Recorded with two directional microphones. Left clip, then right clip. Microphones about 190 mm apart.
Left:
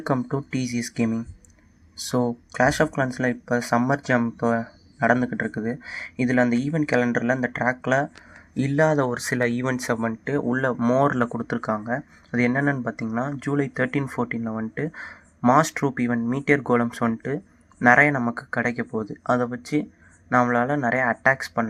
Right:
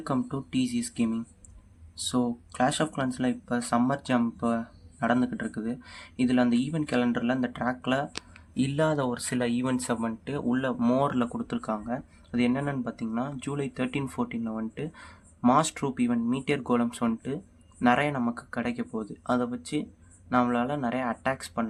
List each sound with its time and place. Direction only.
0.0 s speech: 30° left (ahead or behind)
2.0 s speech: 25° left (ahead or behind)